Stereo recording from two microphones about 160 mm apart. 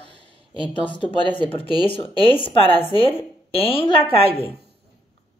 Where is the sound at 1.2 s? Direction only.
30° left (ahead or behind).